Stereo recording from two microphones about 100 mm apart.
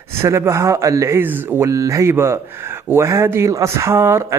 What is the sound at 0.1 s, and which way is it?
Speech, 25° right (ahead or behind).